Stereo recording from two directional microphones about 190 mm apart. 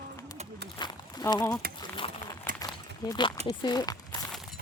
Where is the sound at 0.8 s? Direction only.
20° left (ahead or behind).